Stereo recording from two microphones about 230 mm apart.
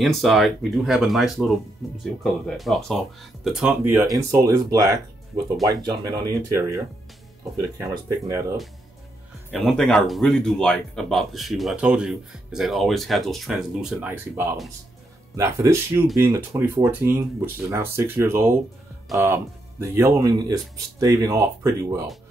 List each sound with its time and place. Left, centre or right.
0.0 s speech: centre
9.5 s speech: centre